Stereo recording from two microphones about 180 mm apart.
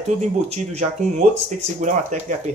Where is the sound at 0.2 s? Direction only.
40° right (ahead or behind).